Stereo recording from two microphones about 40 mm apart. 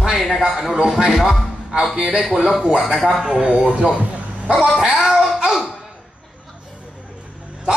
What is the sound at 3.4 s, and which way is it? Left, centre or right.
Music, centre.